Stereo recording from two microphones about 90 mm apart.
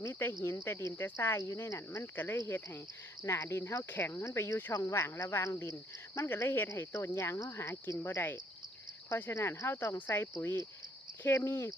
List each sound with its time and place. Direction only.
0.0 s speech: 25° left (ahead or behind)